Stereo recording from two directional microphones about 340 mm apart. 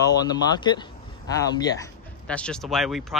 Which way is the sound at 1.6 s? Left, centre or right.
Centre.